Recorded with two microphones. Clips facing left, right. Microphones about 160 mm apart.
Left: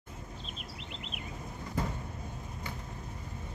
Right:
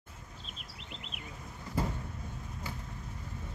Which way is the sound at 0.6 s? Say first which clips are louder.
Left 4 dB; 40° right (ahead or behind).